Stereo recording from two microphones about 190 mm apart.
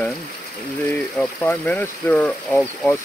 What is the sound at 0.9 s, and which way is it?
Speech, 10° left (ahead or behind).